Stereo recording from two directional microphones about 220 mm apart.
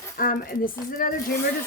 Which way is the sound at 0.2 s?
40° left (ahead or behind).